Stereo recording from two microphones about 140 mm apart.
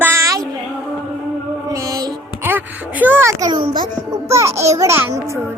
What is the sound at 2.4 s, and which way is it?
A child's voice, 15° right (ahead or behind).